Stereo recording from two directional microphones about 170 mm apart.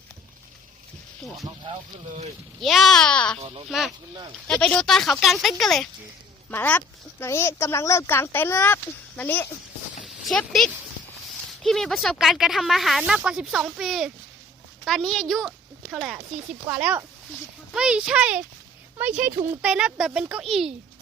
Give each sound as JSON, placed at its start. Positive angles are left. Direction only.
{"t": 2.6, "sound": "speech", "side_deg": 0}
{"t": 3.4, "sound": "speech", "side_deg": -35}
{"t": 3.7, "sound": "a child's voice", "side_deg": 0}